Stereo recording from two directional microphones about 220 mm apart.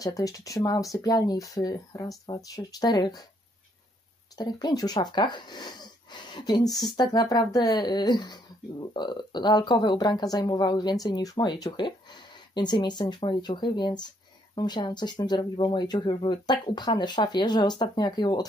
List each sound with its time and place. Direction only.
0.0 s speech: 15° left (ahead or behind)
4.4 s speech: 20° left (ahead or behind)